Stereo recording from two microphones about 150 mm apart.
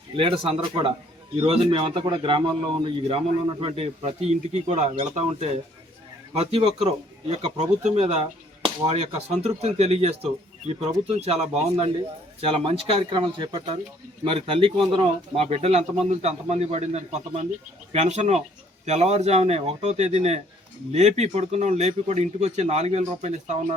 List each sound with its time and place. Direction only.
0.2 s a man's voice: 35° right (ahead or behind)